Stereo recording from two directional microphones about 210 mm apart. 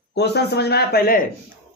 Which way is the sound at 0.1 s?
55° left (ahead or behind).